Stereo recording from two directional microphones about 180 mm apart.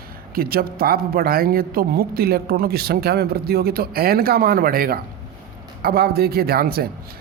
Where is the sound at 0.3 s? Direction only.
55° right (ahead or behind).